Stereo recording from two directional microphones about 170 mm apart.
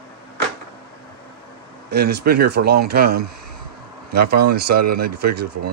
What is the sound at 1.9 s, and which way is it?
Speech, 75° right (ahead or behind).